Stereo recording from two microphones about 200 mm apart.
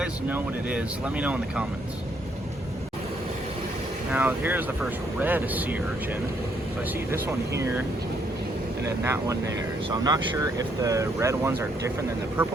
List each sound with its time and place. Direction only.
0.0 s speech: 10° right (ahead or behind)
4.1 s speech: 10° right (ahead or behind)
7.1 s speech: 15° right (ahead or behind)
8.9 s speech: 15° right (ahead or behind)